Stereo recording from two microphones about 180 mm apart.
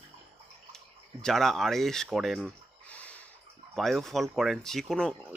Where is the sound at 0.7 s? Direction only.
Centre (ahead or behind).